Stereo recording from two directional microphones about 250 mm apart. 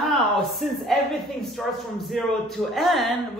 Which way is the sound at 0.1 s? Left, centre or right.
Centre.